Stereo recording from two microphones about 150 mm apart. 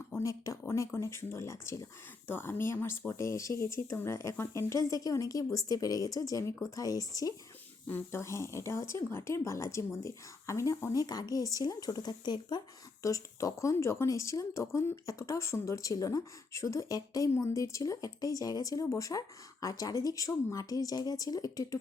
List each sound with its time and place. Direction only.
0.2 s speech: 20° left (ahead or behind)
0.6 s a sound: 15° left (ahead or behind)
0.9 s speech: 15° left (ahead or behind)